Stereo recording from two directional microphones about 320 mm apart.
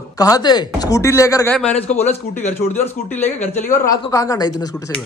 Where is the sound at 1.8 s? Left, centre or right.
Centre.